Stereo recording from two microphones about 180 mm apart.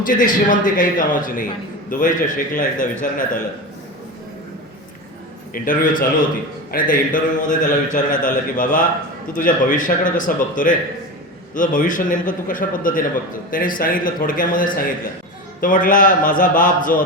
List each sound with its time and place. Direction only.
0.0 s speech: 50° left (ahead or behind)
5.5 s speech: 50° left (ahead or behind)